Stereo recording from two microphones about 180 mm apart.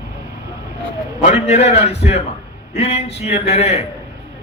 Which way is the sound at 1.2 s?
40° left (ahead or behind).